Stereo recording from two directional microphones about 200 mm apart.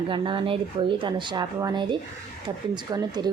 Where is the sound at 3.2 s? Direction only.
20° right (ahead or behind).